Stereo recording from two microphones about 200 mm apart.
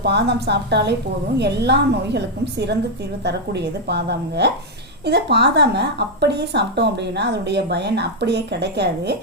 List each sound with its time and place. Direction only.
0.0 s speech: 55° right (ahead or behind)